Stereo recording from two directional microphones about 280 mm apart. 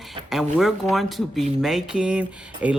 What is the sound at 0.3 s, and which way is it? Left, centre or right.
Speech, centre.